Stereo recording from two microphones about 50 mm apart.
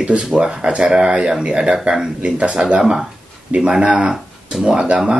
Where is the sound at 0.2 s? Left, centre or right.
Centre.